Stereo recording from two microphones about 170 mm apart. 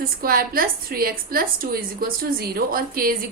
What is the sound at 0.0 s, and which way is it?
A woman's voice, 60° right (ahead or behind).